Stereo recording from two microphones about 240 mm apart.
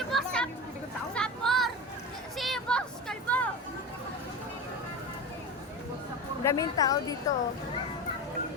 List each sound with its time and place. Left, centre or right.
0.1 s chatter: centre
1.1 s a sound: centre
6.4 s a woman's voice: centre